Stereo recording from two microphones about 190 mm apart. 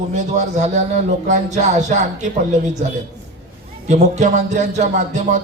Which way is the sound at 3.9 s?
35° right (ahead or behind).